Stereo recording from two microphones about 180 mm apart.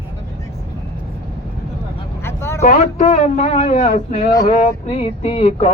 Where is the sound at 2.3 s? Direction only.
15° left (ahead or behind).